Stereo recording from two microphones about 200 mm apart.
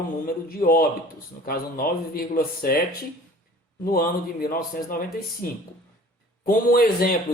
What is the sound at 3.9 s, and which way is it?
Speech, 45° left (ahead or behind).